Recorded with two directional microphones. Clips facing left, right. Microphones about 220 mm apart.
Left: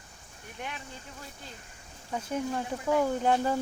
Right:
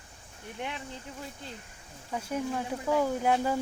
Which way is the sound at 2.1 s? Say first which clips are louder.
Even; 5° right (ahead or behind).